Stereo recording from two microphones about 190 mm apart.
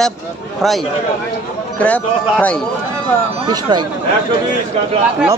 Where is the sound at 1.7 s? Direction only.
5° left (ahead or behind).